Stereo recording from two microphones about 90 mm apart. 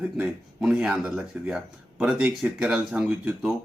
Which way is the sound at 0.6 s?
10° right (ahead or behind).